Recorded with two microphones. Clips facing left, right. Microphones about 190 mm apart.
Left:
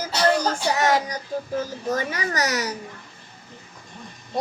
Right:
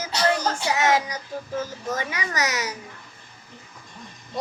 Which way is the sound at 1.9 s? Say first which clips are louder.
Left 5 dB; 35° left (ahead or behind).